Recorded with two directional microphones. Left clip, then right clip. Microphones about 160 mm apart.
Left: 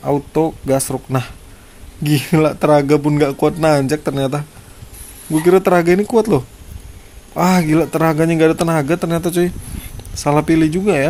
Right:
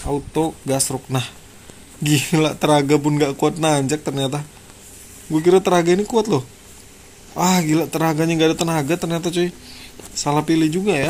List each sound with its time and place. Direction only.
0.0 s speech: 30° left (ahead or behind)